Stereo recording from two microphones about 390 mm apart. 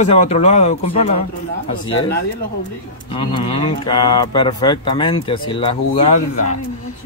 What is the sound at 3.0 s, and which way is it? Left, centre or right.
Speech, centre.